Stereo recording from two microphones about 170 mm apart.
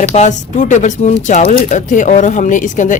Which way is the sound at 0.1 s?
45° left (ahead or behind).